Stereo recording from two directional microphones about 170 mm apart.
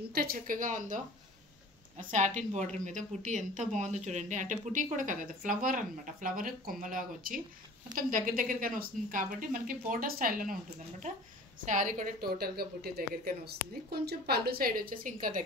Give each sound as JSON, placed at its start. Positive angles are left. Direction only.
{"t": 0.1, "sound": "speech", "side_deg": -60}
{"t": 11.6, "sound": "a woman's voice", "side_deg": -50}